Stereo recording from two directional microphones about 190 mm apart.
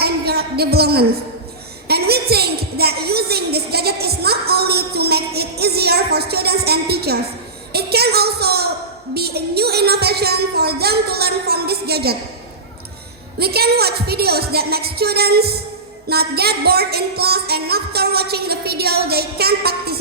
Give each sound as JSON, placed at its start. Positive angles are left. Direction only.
{"t": 0.0, "sound": "a sound", "side_deg": -55}
{"t": 7.7, "sound": "a woman's voice", "side_deg": -55}
{"t": 13.4, "sound": "a woman's voice", "side_deg": -55}